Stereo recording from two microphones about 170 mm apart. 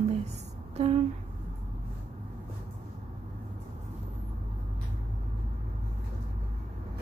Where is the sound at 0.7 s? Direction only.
40° right (ahead or behind).